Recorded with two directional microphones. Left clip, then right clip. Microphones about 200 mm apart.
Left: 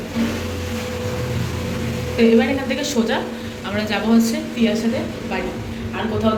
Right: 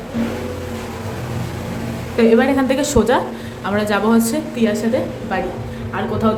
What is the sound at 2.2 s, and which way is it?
Speech, 40° right (ahead or behind).